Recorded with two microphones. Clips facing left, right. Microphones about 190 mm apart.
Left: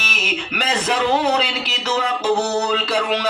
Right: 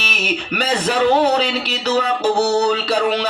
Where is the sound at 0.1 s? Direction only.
40° right (ahead or behind).